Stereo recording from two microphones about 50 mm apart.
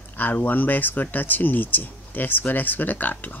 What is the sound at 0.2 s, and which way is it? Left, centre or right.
Speech, left.